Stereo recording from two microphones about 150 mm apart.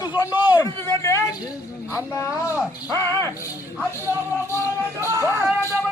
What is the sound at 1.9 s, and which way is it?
Speech, 20° left (ahead or behind).